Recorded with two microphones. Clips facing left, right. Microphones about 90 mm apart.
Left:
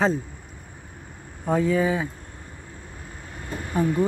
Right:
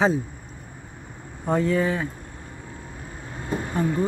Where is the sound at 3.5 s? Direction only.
25° right (ahead or behind).